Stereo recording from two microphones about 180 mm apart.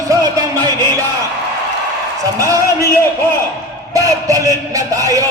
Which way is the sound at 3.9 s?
20° right (ahead or behind).